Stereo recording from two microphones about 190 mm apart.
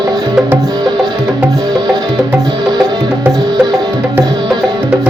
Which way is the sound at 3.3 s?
20° right (ahead or behind).